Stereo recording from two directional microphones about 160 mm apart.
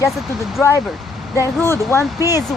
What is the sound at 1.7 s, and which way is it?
Speech, 15° left (ahead or behind).